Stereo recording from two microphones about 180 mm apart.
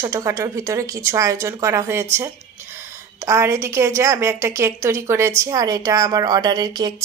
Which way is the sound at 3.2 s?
15° right (ahead or behind).